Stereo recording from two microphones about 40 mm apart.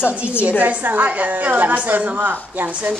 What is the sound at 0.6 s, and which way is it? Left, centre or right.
A woman's voice, right.